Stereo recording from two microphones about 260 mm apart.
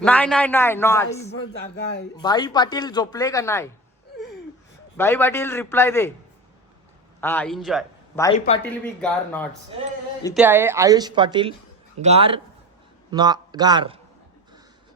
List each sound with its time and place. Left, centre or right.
0.0 s speech: centre
1.5 s speech: left
2.1 s speech: centre
4.9 s speech: centre
7.2 s a man's voice: centre
10.3 s a woman's voice: centre